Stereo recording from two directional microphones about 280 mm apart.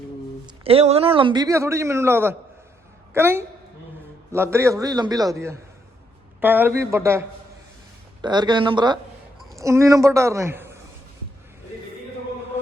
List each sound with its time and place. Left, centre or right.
0.4 s a man's voice: centre